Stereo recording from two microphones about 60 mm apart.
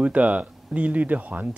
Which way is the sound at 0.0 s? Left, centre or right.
Right.